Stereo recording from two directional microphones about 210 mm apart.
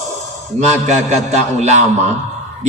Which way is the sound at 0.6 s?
35° right (ahead or behind).